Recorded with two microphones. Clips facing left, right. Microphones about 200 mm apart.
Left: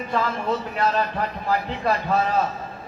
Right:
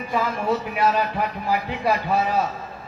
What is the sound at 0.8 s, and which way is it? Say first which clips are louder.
A man's voice: right 1 dB; 10° right (ahead or behind).